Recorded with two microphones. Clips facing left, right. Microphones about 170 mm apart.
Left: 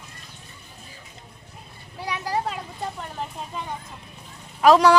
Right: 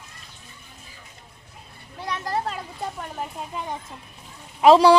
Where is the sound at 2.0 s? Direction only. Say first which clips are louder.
Even; 5° left (ahead or behind).